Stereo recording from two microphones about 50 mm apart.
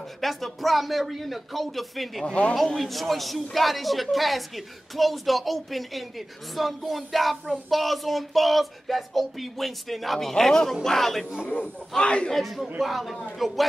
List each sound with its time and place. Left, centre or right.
0.2 s a man's voice: centre
11.4 s a man's voice: left
12.3 s a man's voice: centre